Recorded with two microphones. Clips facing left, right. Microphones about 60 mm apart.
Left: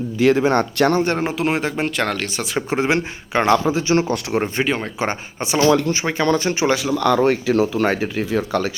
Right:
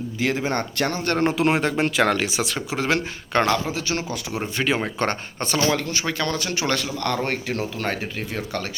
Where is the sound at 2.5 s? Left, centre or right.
Left.